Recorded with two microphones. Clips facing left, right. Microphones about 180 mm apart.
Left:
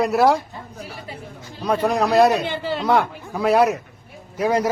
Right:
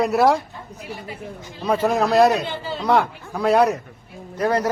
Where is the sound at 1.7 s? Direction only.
Centre (ahead or behind).